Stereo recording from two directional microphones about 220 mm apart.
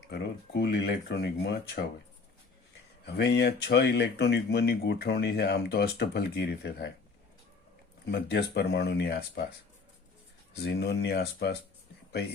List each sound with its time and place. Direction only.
0.1 s speech: 50° left (ahead or behind)
3.1 s speech: 45° left (ahead or behind)
8.0 s speech: 45° left (ahead or behind)
10.6 s speech: 50° left (ahead or behind)